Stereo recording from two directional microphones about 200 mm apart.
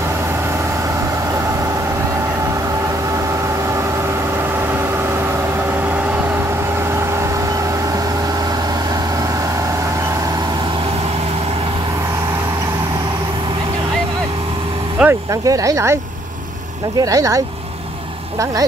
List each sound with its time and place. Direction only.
15.0 s speech: 15° right (ahead or behind)
17.0 s speech: 15° right (ahead or behind)